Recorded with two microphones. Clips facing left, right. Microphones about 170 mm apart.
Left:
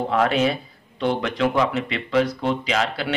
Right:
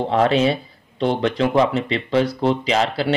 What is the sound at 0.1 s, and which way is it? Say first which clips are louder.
Speech: right 3 dB; 30° right (ahead or behind).